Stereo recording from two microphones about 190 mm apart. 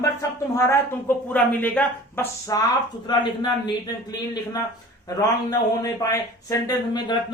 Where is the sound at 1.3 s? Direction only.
10° left (ahead or behind).